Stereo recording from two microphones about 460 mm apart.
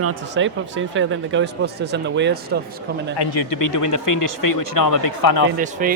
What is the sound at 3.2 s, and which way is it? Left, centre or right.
A man's voice, left.